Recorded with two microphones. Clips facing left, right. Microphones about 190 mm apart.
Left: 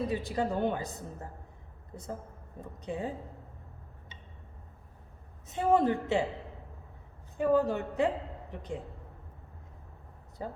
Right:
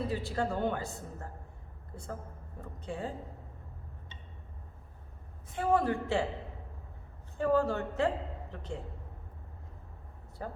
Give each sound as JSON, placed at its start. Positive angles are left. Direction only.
{"t": 0.1, "sound": "a woman's voice", "side_deg": 15}
{"t": 2.6, "sound": "a woman's voice", "side_deg": 15}
{"t": 5.5, "sound": "a woman's voice", "side_deg": 20}
{"t": 7.3, "sound": "a woman's voice", "side_deg": 15}
{"t": 10.4, "sound": "a woman's voice", "side_deg": 20}